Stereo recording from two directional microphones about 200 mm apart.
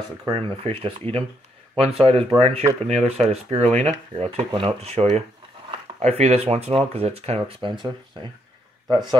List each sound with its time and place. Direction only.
0.3 s speech: 25° right (ahead or behind)
8.9 s speech: 20° right (ahead or behind)